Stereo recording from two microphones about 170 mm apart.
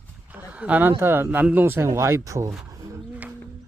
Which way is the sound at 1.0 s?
15° right (ahead or behind).